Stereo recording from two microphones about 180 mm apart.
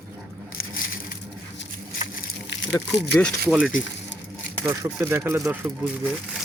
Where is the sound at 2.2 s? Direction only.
90° left.